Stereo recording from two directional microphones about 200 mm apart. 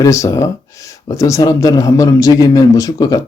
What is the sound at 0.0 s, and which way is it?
Speech, 15° left (ahead or behind).